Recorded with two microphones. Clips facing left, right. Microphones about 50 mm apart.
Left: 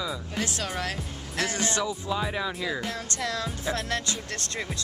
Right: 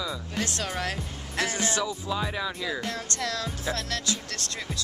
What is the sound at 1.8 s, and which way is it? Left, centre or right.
Speech, centre.